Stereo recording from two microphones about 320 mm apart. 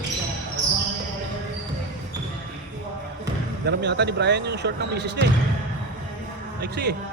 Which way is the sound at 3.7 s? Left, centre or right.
Right.